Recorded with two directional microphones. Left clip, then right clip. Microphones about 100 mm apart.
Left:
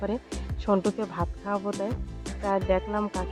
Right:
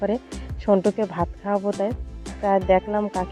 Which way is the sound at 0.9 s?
20° right (ahead or behind).